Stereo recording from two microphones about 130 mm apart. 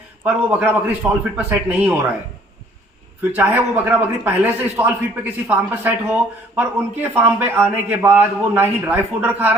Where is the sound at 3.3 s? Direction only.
15° right (ahead or behind).